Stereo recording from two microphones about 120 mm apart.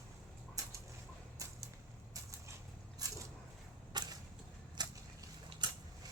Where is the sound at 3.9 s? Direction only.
35° right (ahead or behind).